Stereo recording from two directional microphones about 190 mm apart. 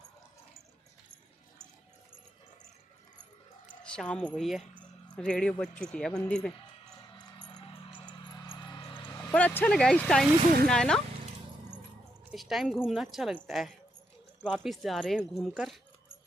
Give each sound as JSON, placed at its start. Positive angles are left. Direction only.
{"t": 3.8, "sound": "speech", "side_deg": 5}
{"t": 8.3, "sound": "music", "side_deg": 25}
{"t": 9.3, "sound": "speech", "side_deg": 5}
{"t": 12.3, "sound": "speech", "side_deg": 0}